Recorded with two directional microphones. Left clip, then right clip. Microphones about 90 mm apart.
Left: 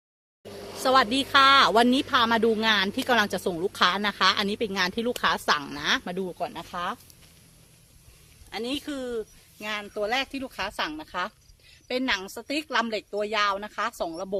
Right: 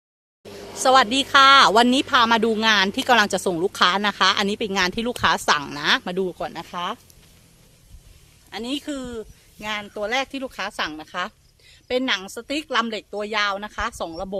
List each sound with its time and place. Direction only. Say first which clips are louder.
0.4 s a sound: right 2 dB; 55° left (ahead or behind)
0.8 s speech: right 5 dB; 90° right
8.4 s speech: right 3 dB; centre (ahead or behind)
9.6 s speech: right 3 dB; 20° right (ahead or behind); by 11.3 s 50° right (ahead or behind)
11.9 s a woman's voice: right 4 dB; 20° right (ahead or behind)